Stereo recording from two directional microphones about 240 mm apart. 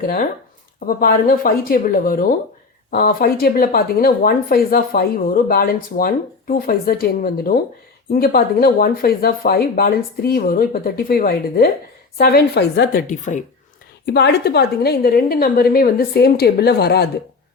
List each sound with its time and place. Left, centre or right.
0.0 s speech: left
14.0 s speech: left